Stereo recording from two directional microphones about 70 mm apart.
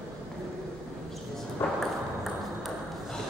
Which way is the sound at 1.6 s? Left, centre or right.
Left.